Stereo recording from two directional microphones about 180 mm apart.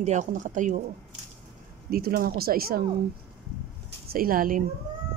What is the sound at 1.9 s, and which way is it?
Speech, 55° right (ahead or behind).